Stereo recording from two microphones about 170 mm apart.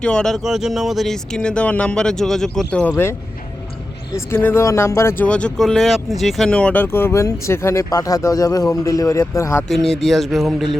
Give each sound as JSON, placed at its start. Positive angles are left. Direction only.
{"t": 0.0, "sound": "speech", "side_deg": 5}
{"t": 2.9, "sound": "speech", "side_deg": 15}
{"t": 4.3, "sound": "speech", "side_deg": 10}
{"t": 9.6, "sound": "speech", "side_deg": 0}